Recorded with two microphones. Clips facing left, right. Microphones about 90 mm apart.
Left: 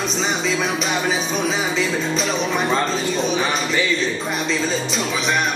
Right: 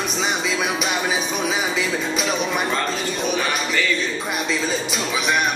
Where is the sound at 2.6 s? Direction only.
30° left (ahead or behind).